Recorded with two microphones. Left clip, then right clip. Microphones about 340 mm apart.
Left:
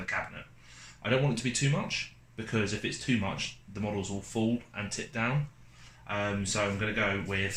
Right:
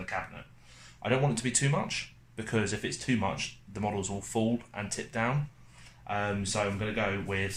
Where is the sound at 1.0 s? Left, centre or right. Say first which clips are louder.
Even; centre.